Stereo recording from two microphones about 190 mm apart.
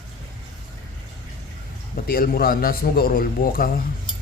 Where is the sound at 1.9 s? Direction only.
50° left (ahead or behind).